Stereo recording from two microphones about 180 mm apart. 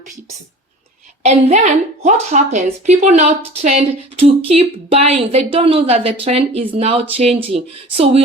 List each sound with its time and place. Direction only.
1.2 s speech: 40° right (ahead or behind)